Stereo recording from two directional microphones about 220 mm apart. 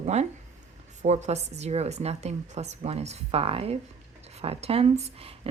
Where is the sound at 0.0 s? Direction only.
30° right (ahead or behind).